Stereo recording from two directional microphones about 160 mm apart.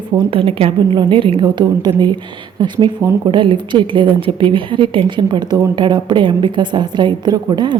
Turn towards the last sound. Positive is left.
turn(degrees=-25)  # may be behind; listen again after turning